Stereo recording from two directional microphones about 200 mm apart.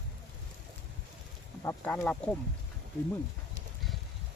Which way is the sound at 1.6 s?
15° left (ahead or behind).